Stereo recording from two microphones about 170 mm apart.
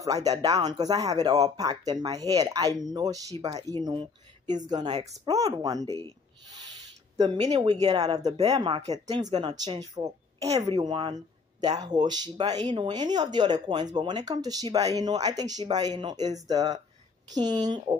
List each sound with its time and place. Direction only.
0.0 s speech: 20° right (ahead or behind)
7.4 s speech: 25° right (ahead or behind)
10.4 s a woman's voice: 40° right (ahead or behind)
10.8 s speech: 25° right (ahead or behind)